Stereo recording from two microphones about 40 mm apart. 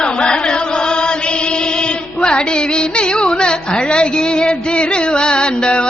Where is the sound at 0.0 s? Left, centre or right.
Left.